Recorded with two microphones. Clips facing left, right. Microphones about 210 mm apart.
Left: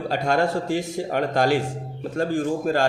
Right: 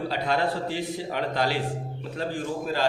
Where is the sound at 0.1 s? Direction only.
45° left (ahead or behind).